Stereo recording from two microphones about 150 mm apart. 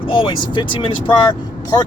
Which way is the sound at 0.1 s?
35° left (ahead or behind).